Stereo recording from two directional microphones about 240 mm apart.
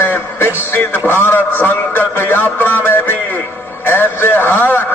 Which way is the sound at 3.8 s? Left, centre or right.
Centre.